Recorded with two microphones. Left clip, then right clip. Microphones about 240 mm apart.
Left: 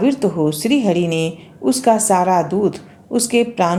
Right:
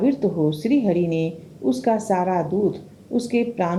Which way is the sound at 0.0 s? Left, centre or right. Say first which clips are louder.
Left 4 dB; centre.